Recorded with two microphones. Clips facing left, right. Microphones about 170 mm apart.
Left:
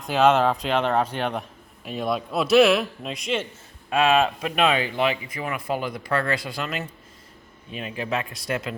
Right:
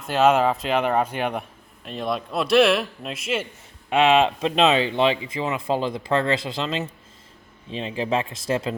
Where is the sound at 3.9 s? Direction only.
20° right (ahead or behind).